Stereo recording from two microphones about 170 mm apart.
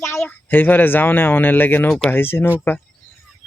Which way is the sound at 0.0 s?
15° left (ahead or behind).